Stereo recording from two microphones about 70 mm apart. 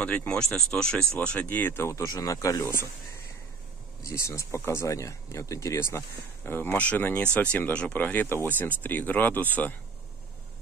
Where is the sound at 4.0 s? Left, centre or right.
Left.